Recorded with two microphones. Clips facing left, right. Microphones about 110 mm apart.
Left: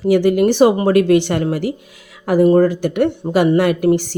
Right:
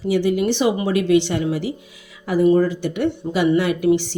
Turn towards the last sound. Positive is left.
turn(degrees=50)  # may be behind; listen again after turning